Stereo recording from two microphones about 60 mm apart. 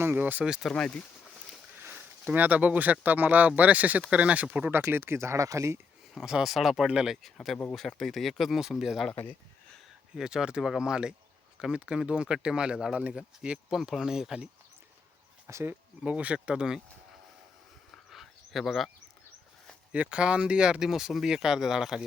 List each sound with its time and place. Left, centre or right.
0.0 s speech: right
0.7 s speech: centre
2.0 s speech: right
4.7 s speech: right
5.4 s speech: right
6.1 s speech: centre
7.7 s speech: centre
10.2 s speech: centre
13.4 s speech: centre
15.5 s speech: right
16.0 s speech: right
18.1 s a sound: centre
19.9 s speech: centre